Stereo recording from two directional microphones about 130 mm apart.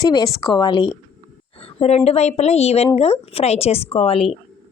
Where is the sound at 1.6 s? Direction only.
50° left (ahead or behind).